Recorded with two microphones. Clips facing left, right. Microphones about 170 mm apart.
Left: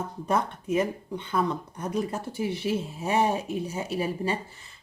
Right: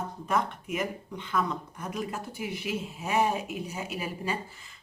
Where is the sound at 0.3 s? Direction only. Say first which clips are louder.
Left 3 dB; 30° left (ahead or behind).